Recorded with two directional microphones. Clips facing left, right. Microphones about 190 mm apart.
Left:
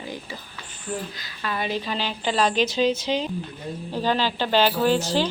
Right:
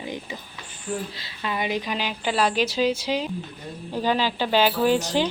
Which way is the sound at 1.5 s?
15° right (ahead or behind).